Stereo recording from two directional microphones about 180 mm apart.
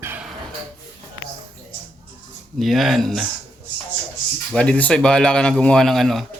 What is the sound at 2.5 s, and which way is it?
Speech, centre (ahead or behind).